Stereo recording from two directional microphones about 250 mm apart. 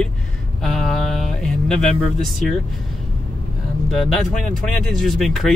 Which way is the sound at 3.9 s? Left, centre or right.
Centre.